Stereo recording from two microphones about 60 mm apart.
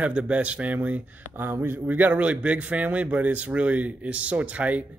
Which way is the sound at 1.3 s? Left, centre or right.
Right.